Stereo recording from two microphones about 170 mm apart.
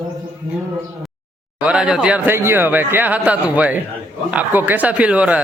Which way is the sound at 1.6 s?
5° right (ahead or behind).